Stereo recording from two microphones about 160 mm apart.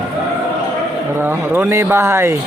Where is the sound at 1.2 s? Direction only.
15° right (ahead or behind).